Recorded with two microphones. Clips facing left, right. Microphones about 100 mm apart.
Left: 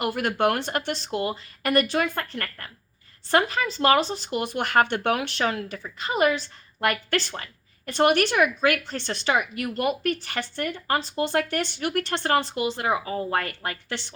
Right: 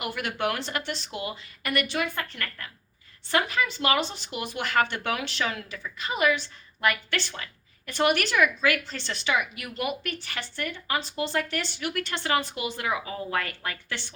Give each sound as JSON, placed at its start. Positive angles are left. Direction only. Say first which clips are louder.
{"t": 0.0, "sound": "a woman's voice", "louder": "left 6 dB", "side_deg": 40}
{"t": 12.4, "sound": "a woman's voice", "louder": "left 5 dB", "side_deg": 30}